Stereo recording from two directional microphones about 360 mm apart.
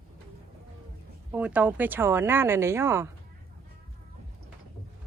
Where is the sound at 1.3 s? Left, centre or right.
Centre.